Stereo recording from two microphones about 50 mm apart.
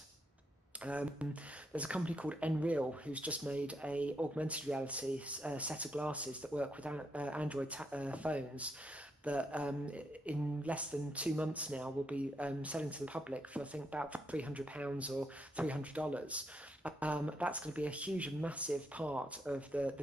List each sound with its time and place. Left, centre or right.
0.8 s speech: right